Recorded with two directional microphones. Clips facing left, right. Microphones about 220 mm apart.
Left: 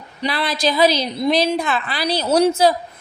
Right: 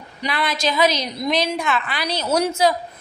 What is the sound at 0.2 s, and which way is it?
A woman's voice, 30° left (ahead or behind).